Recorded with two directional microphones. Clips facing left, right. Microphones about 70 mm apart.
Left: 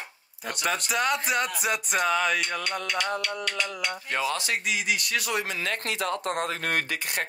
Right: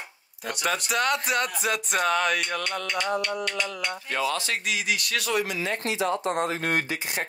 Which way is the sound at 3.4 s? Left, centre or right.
Centre.